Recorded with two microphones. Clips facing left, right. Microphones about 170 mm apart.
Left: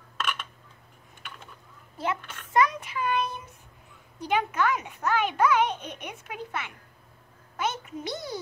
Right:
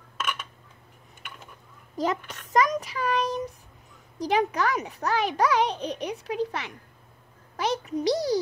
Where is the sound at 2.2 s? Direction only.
40° right (ahead or behind).